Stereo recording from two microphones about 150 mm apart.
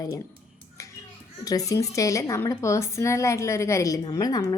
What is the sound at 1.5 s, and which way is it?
A woman's voice, 25° left (ahead or behind).